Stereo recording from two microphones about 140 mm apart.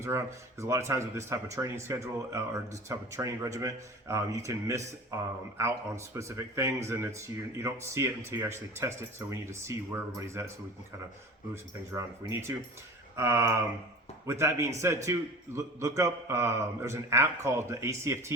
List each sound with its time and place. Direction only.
0.6 s speech: 20° right (ahead or behind)
11.5 s speech: 20° right (ahead or behind)